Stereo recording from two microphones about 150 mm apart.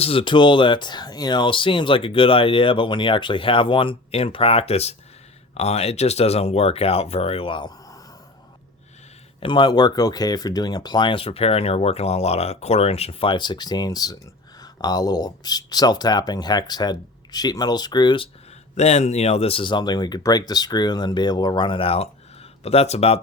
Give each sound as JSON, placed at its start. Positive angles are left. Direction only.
{"t": 0.0, "sound": "speech", "side_deg": 35}
{"t": 9.4, "sound": "speech", "side_deg": 30}
{"t": 18.8, "sound": "speech", "side_deg": 50}